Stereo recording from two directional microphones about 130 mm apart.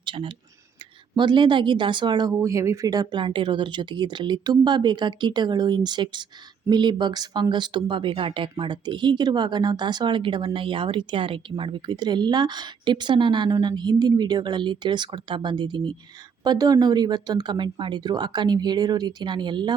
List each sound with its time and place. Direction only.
0.0 s speech: 40° right (ahead or behind)
2.3 s speech: 25° right (ahead or behind)